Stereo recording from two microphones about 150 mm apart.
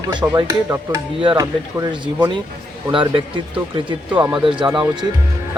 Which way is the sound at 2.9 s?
35° right (ahead or behind).